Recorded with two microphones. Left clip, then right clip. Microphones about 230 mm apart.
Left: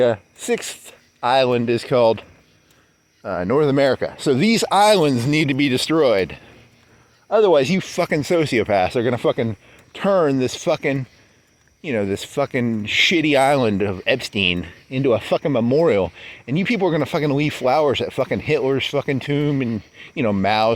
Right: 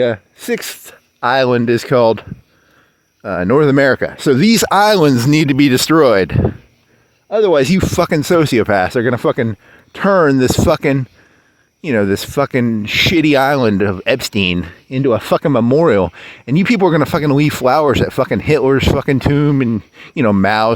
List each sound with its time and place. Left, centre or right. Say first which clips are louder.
0.0 s speech: right 2 dB; right
3.2 s speech: right 6 dB; right
7.3 s speech: right 3 dB; right